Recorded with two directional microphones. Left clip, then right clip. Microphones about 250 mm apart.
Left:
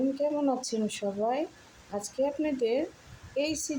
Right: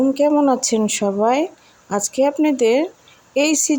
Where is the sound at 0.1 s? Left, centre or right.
Right.